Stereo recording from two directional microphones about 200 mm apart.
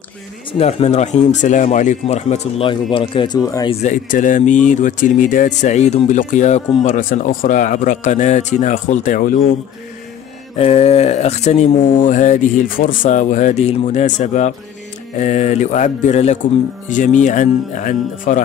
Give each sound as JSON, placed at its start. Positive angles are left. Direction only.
{"t": 0.5, "sound": "speech", "side_deg": 30}
{"t": 3.8, "sound": "speech", "side_deg": 40}
{"t": 10.6, "sound": "speech", "side_deg": 30}